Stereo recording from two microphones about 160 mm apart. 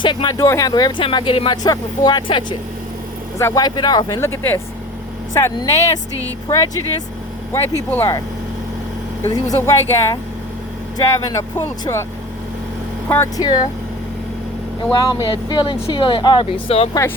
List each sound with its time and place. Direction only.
0.0 s speech: 30° left (ahead or behind)
3.3 s speech: 20° left (ahead or behind)
7.5 s speech: 15° left (ahead or behind)
9.3 s speech: 20° left (ahead or behind)
13.1 s speech: 15° left (ahead or behind)
13.4 s speech: 25° left (ahead or behind)
14.9 s speech: 30° left (ahead or behind)